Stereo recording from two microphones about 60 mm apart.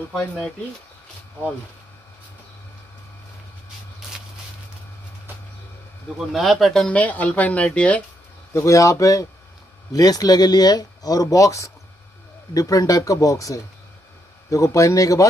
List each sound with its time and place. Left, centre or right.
6.1 s speech: centre
6.9 s speech: left
8.5 s speech: left
9.9 s speech: left
14.5 s speech: left